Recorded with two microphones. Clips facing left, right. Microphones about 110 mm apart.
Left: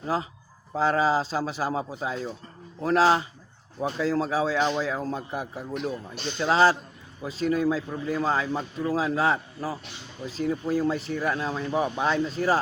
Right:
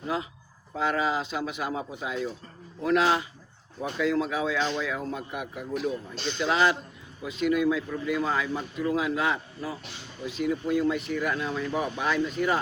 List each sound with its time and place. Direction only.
0.1 s speech: 35° left (ahead or behind)